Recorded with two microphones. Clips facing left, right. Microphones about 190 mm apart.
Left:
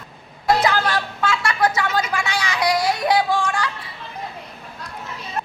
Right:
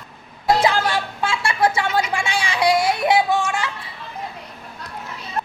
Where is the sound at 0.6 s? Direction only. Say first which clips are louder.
Right 1 dB; 25° right (ahead or behind).